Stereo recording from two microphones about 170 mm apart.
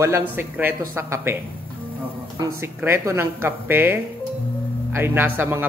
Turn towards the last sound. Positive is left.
turn(degrees=-10)  # may be behind; listen again after turning